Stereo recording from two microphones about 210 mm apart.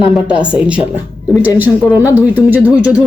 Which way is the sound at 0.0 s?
5° right (ahead or behind).